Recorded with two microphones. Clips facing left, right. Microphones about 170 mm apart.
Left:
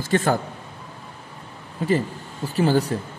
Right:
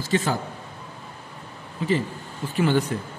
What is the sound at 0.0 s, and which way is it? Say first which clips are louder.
Speech: left 3 dB; 50° left (ahead or behind).